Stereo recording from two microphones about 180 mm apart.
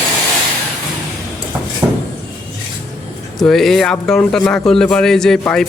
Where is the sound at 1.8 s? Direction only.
20° right (ahead or behind).